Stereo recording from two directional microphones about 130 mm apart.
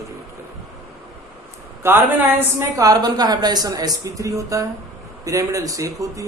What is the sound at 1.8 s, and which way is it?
A man's voice, 20° right (ahead or behind).